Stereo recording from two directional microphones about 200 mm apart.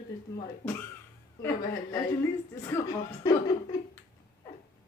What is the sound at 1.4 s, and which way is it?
A woman's voice, 15° left (ahead or behind).